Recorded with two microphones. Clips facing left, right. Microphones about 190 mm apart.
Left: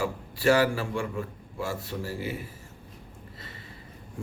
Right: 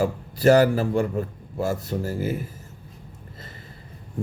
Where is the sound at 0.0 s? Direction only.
40° right (ahead or behind).